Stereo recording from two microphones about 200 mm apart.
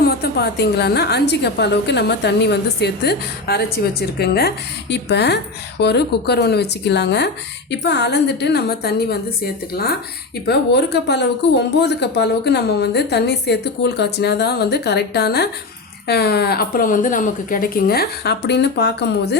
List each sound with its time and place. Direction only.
0.0 s speech: 55° left (ahead or behind)